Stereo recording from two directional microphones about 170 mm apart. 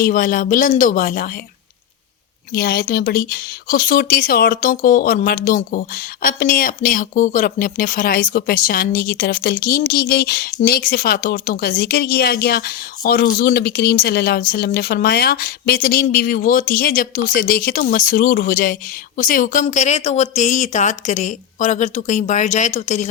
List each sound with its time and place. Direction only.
0.0 s speech: 55° left (ahead or behind)
2.5 s a woman's voice: 65° left (ahead or behind)
19.6 s speech: 40° left (ahead or behind)